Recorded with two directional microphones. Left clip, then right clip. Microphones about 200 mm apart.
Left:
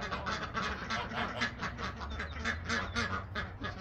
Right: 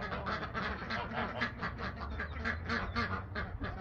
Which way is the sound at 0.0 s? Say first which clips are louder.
Left 1 dB; centre (ahead or behind).